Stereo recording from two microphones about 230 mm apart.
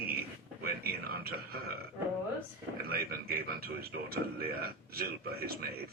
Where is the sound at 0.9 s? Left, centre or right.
Right.